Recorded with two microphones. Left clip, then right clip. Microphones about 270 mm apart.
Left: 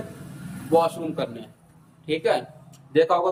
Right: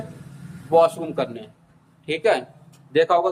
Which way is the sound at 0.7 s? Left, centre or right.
Centre.